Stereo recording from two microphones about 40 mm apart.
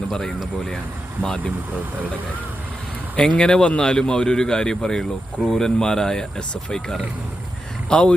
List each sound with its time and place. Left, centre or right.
1.2 s speech: centre
3.2 s speech: centre
7.9 s speech: left